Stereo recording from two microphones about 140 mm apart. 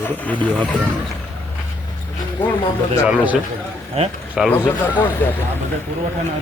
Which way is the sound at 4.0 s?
45° right (ahead or behind).